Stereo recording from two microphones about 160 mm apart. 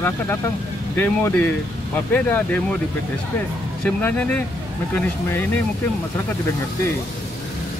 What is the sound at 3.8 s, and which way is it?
Speech, 10° left (ahead or behind).